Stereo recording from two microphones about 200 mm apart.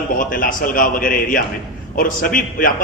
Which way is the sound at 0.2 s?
45° left (ahead or behind).